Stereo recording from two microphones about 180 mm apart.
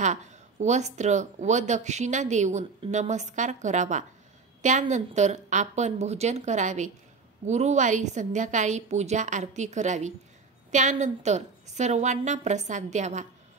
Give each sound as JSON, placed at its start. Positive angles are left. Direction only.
{"t": 0.0, "sound": "speech", "side_deg": -40}